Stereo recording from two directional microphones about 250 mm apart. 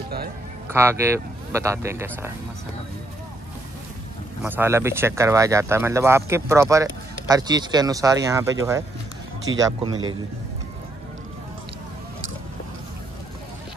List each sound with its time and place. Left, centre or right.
0.7 s speech: centre
4.4 s speech: centre